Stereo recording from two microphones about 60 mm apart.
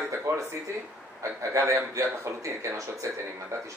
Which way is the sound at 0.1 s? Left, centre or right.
Right.